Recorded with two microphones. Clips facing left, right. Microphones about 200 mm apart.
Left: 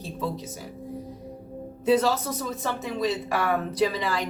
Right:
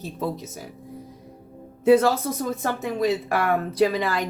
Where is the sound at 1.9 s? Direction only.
55° right (ahead or behind).